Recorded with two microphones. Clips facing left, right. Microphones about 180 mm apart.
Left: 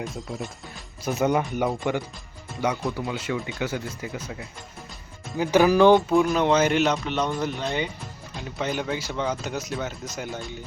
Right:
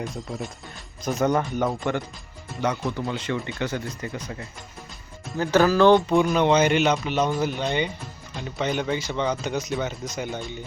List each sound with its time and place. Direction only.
0.0 s speech: centre (ahead or behind)
6.1 s speech: centre (ahead or behind)